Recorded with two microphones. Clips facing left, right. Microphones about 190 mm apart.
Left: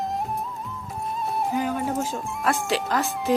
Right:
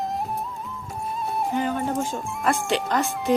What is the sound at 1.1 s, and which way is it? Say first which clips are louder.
Speech: even; centre (ahead or behind).